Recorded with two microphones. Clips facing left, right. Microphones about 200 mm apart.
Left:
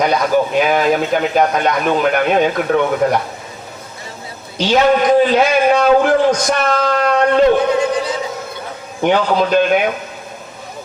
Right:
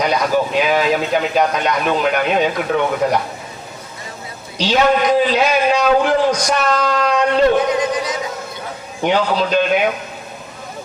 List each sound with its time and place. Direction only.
0.0 s speech: 50° left (ahead or behind)
4.5 s speech: 50° left (ahead or behind)
7.8 s speech: 30° left (ahead or behind)
9.0 s speech: 50° left (ahead or behind)